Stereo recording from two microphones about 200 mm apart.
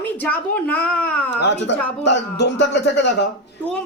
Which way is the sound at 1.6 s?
60° left (ahead or behind).